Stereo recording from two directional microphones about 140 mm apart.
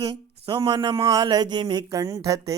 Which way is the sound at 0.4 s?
40° right (ahead or behind).